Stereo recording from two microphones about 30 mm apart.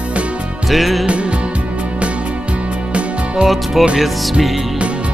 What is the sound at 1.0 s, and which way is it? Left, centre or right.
Music, right.